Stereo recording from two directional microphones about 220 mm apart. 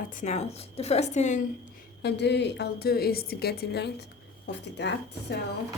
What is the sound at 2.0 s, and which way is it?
A woman's voice, 50° left (ahead or behind).